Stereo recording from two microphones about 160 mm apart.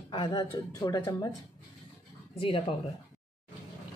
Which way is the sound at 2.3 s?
35° left (ahead or behind).